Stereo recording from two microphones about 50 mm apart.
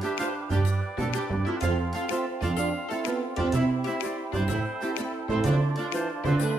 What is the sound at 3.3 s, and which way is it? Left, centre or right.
Music, centre.